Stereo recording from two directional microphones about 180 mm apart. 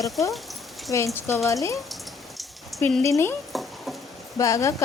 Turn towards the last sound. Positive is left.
turn(degrees=15)  # may be behind; listen again after turning